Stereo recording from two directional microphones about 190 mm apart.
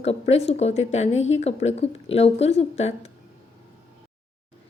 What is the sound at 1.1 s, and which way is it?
Speech, 90° left.